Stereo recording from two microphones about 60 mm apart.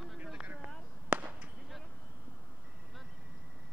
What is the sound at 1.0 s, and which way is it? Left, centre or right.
Fireworks, right.